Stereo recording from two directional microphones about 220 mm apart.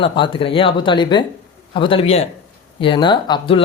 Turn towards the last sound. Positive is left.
turn(degrees=20)  # may be behind; listen again after turning